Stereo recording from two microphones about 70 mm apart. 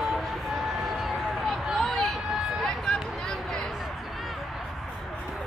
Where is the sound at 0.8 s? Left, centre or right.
Centre.